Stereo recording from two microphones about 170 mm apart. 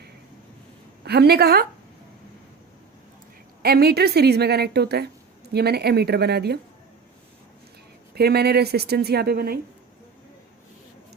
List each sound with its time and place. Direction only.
1.0 s a woman's voice: 70° right (ahead or behind)
3.6 s a woman's voice: 65° right (ahead or behind)
8.1 s a woman's voice: 70° right (ahead or behind)